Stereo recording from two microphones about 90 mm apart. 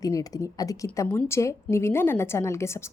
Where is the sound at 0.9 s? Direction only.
30° left (ahead or behind).